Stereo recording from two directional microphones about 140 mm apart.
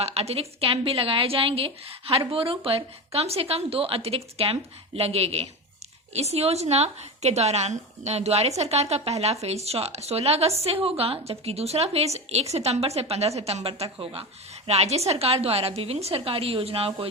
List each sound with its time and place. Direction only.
0.0 s a woman's voice: 50° right (ahead or behind)